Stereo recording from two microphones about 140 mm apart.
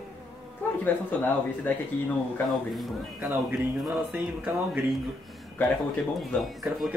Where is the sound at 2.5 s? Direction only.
Centre (ahead or behind).